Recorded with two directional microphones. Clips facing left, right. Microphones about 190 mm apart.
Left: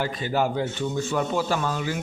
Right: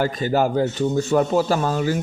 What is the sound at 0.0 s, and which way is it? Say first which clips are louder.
Speech: right 5 dB; 45° right (ahead or behind).